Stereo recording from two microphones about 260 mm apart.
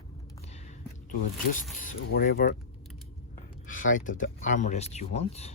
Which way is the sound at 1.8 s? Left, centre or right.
Left.